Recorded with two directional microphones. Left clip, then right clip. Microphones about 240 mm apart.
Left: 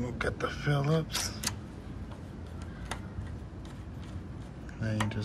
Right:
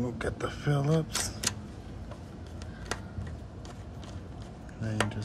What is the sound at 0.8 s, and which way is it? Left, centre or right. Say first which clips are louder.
Speech: right 3 dB; centre.